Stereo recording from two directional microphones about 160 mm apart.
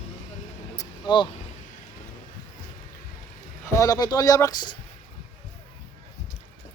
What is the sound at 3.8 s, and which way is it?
Speech, 20° left (ahead or behind).